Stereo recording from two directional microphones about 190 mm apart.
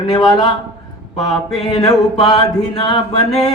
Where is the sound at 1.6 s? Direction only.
25° left (ahead or behind).